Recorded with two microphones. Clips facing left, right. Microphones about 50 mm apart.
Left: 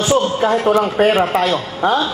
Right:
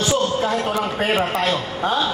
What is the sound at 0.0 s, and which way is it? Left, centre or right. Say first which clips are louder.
A man's voice: left 4 dB; left.